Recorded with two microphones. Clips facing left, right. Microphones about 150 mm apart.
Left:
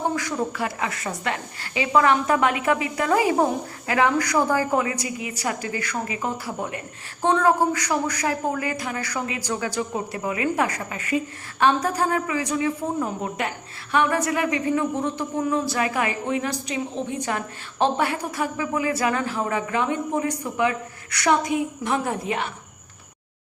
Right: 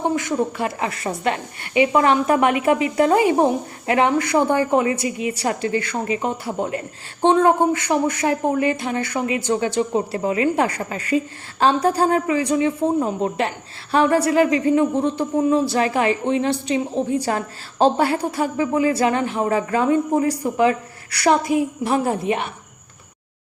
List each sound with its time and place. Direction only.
0.2 s a woman's voice: 25° right (ahead or behind)
19.5 s speech: 40° right (ahead or behind)
21.5 s a woman's voice: 25° left (ahead or behind)
21.8 s a woman's voice: 30° right (ahead or behind)